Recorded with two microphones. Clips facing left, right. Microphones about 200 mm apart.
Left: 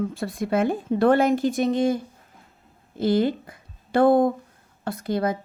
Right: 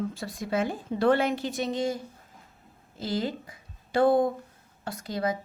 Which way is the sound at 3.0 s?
55° left (ahead or behind).